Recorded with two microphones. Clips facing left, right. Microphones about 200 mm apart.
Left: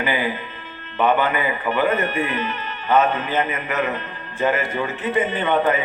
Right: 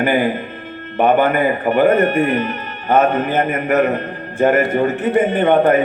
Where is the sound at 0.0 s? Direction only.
50° right (ahead or behind).